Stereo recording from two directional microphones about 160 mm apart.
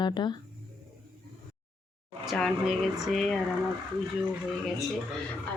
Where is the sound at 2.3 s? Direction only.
Centre (ahead or behind).